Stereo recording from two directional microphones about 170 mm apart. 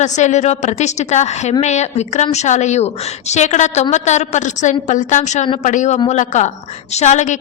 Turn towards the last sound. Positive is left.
turn(degrees=45)  # may be behind; listen again after turning